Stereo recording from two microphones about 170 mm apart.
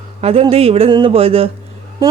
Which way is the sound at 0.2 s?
35° right (ahead or behind).